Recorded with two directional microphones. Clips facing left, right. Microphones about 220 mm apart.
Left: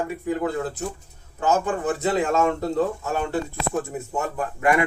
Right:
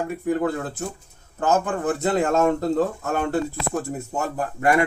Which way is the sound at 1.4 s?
50° right (ahead or behind).